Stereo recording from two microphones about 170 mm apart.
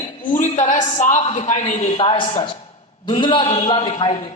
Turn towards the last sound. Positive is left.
turn(degrees=30)  # may be behind; listen again after turning